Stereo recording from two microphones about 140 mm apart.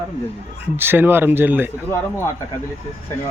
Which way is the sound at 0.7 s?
15° right (ahead or behind).